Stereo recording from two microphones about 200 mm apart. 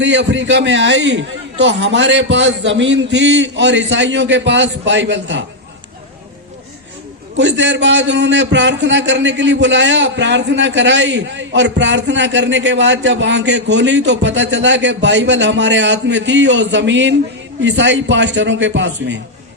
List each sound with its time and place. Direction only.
0.0 s a man's voice: 65° right (ahead or behind)
7.3 s a man's voice: 65° right (ahead or behind)